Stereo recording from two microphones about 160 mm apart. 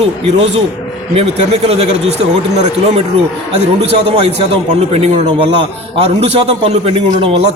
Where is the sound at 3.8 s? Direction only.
40° right (ahead or behind).